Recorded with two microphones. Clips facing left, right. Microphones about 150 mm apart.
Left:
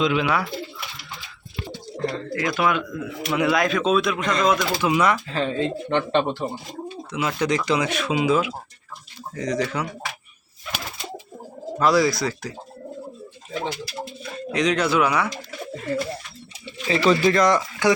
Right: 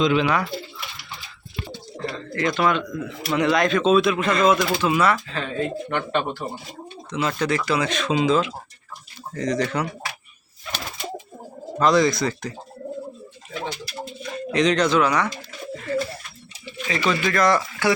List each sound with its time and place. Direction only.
0.0 s speech: 5° left (ahead or behind)
2.3 s speech: 5° left (ahead or behind)
4.8 s speech: 15° left (ahead or behind)
5.3 s speech: 30° left (ahead or behind)
7.1 s speech: 10° left (ahead or behind)
11.8 s speech: 5° left (ahead or behind)
14.3 s speech: centre (ahead or behind)
16.6 s a sound: 30° left (ahead or behind)
17.1 s speech: 30° left (ahead or behind)
17.4 s speech: 15° left (ahead or behind)